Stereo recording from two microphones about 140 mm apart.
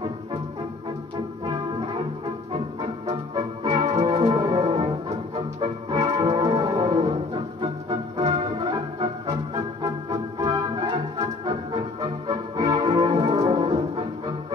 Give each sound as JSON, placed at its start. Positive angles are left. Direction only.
{"t": 2.5, "sound": "music", "side_deg": -35}
{"t": 3.6, "sound": "organ", "side_deg": -30}
{"t": 4.2, "sound": "music", "side_deg": -35}
{"t": 12.5, "sound": "music", "side_deg": -25}